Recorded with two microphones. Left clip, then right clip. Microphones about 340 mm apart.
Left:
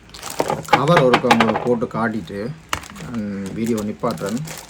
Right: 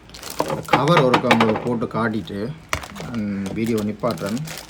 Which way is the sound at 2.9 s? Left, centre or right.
Centre.